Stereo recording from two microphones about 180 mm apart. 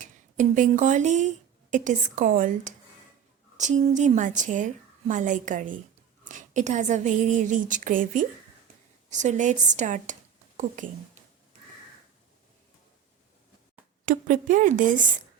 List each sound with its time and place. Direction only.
0.0 s a woman's voice: 45° right (ahead or behind)
14.0 s a woman's voice: 50° right (ahead or behind)